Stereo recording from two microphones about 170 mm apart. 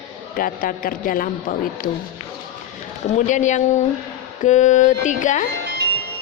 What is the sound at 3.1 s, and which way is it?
Speech, 45° left (ahead or behind).